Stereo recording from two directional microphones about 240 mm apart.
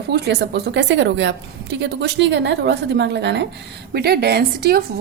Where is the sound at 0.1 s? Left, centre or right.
Right.